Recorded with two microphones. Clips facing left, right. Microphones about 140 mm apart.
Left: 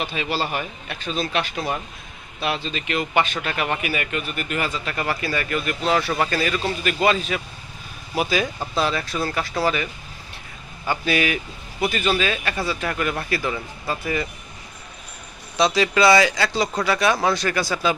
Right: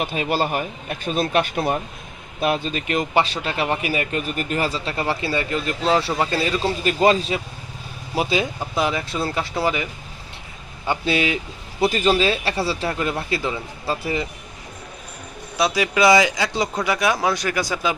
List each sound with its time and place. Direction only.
0.0 s speech: 45° right (ahead or behind); by 11.3 s 25° right (ahead or behind)
11.8 s speech: 35° right (ahead or behind)
15.5 s speech: 10° right (ahead or behind)